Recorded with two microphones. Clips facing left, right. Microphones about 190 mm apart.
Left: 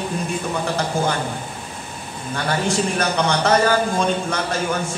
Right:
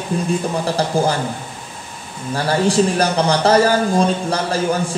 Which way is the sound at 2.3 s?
35° right (ahead or behind).